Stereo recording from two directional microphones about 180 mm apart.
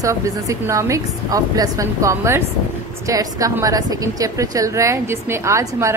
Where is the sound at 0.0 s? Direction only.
20° right (ahead or behind).